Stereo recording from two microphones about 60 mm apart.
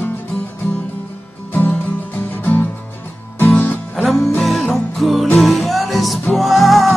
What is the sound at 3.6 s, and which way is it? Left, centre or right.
Music, left.